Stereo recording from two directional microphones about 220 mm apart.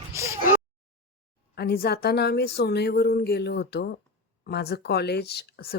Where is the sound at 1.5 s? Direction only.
45° left (ahead or behind).